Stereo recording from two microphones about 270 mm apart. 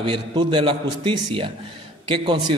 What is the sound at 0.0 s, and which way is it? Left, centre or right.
A man's voice, centre.